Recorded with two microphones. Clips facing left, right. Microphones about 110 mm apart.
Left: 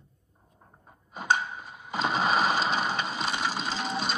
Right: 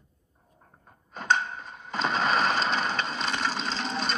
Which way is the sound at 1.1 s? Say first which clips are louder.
Right 1 dB; 10° left (ahead or behind).